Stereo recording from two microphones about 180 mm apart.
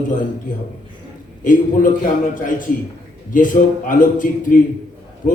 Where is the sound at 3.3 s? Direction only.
45° left (ahead or behind).